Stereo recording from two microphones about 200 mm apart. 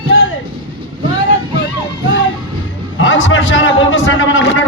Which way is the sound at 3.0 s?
70° left (ahead or behind).